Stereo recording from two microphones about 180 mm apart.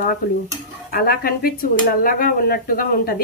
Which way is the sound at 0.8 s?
55° left (ahead or behind).